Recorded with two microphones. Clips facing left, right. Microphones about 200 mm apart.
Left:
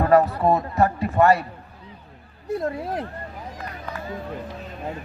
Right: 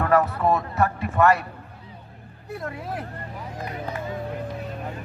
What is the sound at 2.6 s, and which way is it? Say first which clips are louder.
Speech: left 4 dB; 35° left (ahead or behind).